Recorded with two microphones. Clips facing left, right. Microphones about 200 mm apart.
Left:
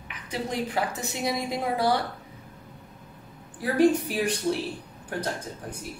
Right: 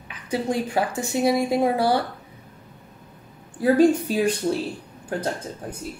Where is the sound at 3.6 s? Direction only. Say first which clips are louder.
Right 4 dB; 25° right (ahead or behind).